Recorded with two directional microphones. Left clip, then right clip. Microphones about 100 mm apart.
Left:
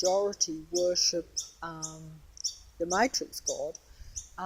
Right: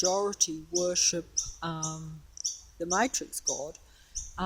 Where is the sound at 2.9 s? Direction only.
30° right (ahead or behind).